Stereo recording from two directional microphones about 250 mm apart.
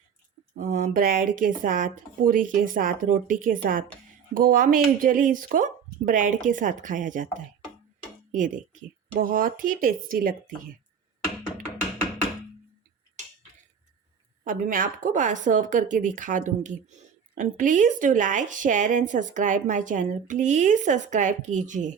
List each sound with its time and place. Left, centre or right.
0.5 s speech: right
8.3 s speech: right
14.4 s speech: right